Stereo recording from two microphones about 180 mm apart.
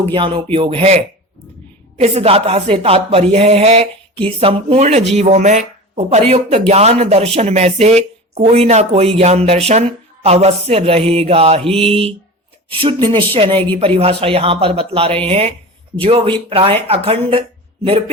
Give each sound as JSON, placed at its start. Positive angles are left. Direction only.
{"t": 0.0, "sound": "speech", "side_deg": -30}